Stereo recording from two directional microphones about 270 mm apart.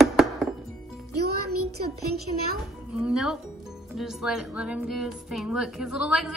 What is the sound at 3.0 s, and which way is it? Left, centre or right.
Speech, centre.